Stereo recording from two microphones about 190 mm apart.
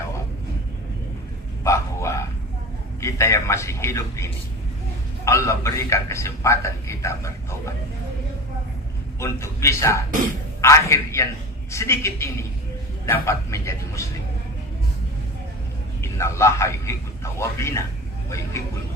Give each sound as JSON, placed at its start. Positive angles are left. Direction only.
{"t": 1.6, "sound": "bow-wow", "side_deg": 15}
{"t": 3.0, "sound": "a man's voice", "side_deg": 15}
{"t": 9.2, "sound": "a man's voice", "side_deg": 15}
{"t": 16.0, "sound": "a man's voice", "side_deg": 15}